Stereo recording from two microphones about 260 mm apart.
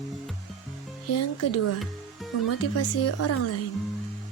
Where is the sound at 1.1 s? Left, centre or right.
Left.